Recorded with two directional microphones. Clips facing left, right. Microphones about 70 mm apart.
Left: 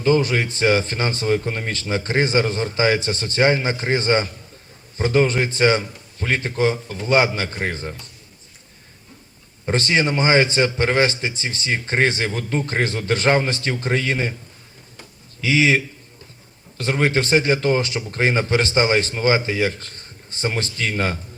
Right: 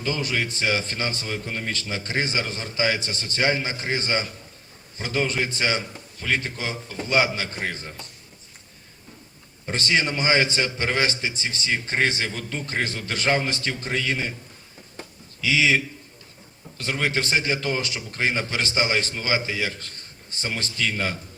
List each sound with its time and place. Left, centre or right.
0.0 s a man's voice: left
9.6 s a man's voice: left
15.4 s a man's voice: left